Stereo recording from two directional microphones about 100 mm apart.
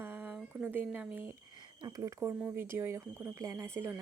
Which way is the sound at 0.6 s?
20° right (ahead or behind).